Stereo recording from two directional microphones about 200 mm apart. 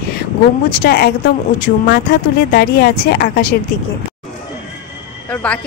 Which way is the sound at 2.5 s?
50° left (ahead or behind).